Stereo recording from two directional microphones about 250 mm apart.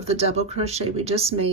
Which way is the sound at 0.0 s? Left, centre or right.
Right.